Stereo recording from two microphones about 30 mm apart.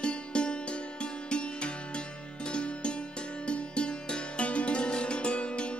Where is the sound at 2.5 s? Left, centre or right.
Left.